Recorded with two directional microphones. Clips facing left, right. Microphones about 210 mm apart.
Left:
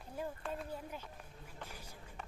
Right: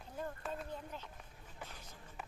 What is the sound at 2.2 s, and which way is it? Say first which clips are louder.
Walk: right 1 dB; 5° right (ahead or behind).